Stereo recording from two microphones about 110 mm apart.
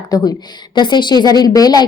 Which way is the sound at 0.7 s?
45° left (ahead or behind).